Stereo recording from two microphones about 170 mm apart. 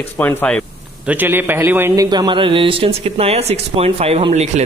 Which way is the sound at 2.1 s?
25° right (ahead or behind).